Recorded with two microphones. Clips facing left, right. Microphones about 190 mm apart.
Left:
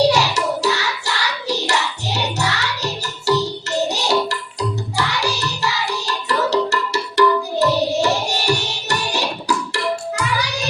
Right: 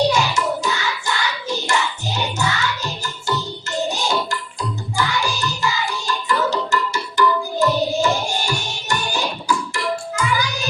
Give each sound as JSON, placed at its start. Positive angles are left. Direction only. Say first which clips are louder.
{"t": 0.1, "sound": "hands", "louder": "left 1 dB", "side_deg": 70}
{"t": 3.8, "sound": "music", "louder": "left 2 dB", "side_deg": 70}